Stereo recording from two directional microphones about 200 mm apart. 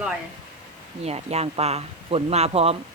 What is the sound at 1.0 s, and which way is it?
Speech, 30° right (ahead or behind).